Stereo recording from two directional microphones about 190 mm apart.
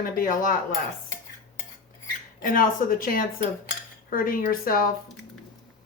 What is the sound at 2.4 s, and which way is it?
A woman's voice, 45° left (ahead or behind).